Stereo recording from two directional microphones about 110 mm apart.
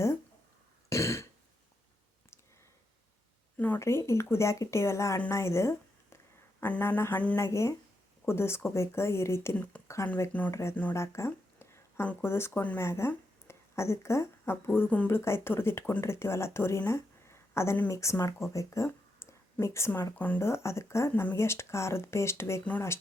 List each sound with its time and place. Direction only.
0.9 s throat clearing: 25° left (ahead or behind)
3.6 s speech: 20° left (ahead or behind)
7.3 s speech: 25° left (ahead or behind)
10.0 s speech: 40° left (ahead or behind)
10.5 s speech: 25° left (ahead or behind)
14.8 s speech: 15° left (ahead or behind)